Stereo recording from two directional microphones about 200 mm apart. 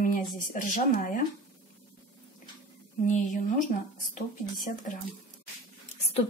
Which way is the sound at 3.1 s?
40° left (ahead or behind).